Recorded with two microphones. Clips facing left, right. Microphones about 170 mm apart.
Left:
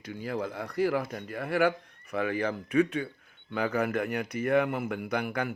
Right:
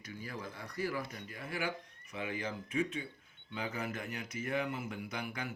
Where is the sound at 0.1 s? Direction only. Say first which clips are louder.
Left 11 dB; 70° left (ahead or behind).